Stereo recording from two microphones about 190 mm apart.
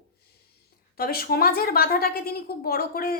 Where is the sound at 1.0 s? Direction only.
55° left (ahead or behind).